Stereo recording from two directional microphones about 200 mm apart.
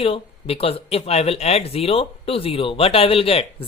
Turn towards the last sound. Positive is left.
turn(degrees=30)  # may be behind; listen again after turning